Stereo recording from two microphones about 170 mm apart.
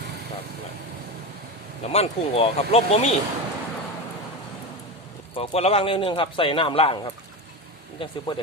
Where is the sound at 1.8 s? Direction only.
35° left (ahead or behind).